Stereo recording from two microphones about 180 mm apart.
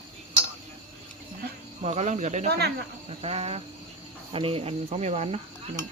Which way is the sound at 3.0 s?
35° right (ahead or behind).